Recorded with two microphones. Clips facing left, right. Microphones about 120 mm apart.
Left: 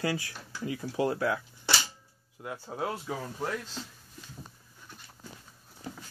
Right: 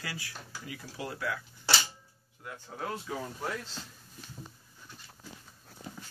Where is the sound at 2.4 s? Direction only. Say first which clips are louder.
Left 6 dB; 30° left (ahead or behind).